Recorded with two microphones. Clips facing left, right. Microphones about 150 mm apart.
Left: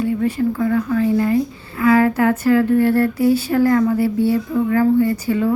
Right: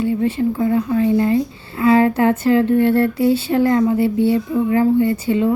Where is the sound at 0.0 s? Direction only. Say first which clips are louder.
Right 1 dB; 25° right (ahead or behind).